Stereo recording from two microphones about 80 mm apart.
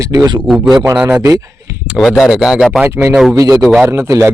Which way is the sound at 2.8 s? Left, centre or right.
Right.